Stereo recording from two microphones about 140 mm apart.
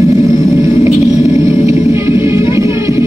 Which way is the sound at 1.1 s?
20° right (ahead or behind).